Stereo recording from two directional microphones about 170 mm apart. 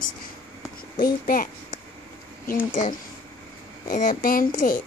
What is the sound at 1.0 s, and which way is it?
Speech, 55° left (ahead or behind).